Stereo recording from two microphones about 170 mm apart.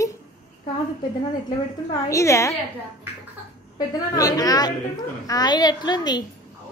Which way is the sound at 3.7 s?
20° left (ahead or behind).